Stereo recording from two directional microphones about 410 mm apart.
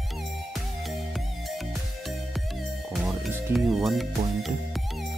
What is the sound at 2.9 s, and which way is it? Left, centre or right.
Speech, centre.